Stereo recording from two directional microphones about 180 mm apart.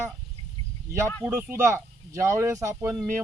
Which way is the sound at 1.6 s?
15° right (ahead or behind).